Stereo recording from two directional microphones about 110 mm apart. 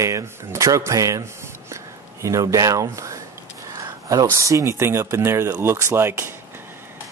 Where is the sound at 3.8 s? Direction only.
35° right (ahead or behind).